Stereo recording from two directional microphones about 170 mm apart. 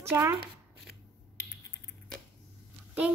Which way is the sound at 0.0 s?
15° right (ahead or behind).